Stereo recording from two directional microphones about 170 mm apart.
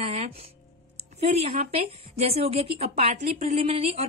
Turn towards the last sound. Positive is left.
turn(degrees=-35)  # may be behind; listen again after turning